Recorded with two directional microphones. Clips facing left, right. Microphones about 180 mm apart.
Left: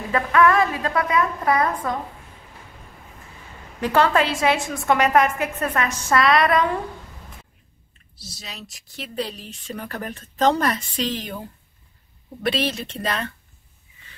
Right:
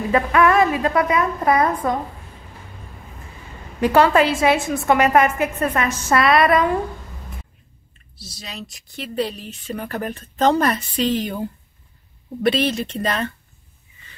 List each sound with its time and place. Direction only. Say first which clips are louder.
0.1 s a woman's voice: right 1 dB; 15° right (ahead or behind)
3.8 s a woman's voice: right 4 dB; 10° right (ahead or behind)
8.4 s a woman's voice: right 5 dB; centre (ahead or behind)
12.4 s a woman's voice: right 5 dB; centre (ahead or behind)